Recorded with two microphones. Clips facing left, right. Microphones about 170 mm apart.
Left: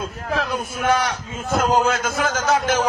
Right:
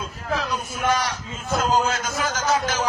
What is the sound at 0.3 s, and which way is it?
A man's voice, 55° left (ahead or behind).